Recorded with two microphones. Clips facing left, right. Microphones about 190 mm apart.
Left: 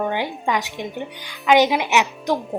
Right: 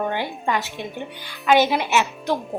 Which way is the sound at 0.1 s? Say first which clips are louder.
Left 1 dB; 15° left (ahead or behind).